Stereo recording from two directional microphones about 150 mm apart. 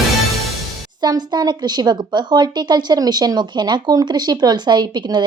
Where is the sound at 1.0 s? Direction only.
30° right (ahead or behind).